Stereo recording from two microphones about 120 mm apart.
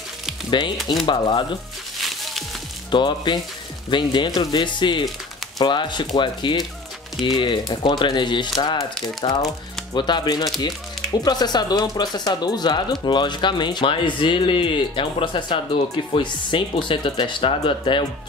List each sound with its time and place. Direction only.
0.5 s speech: 40° left (ahead or behind)
2.0 s music: centre (ahead or behind)
2.9 s speech: 40° left (ahead or behind)
9.9 s speech: 40° left (ahead or behind)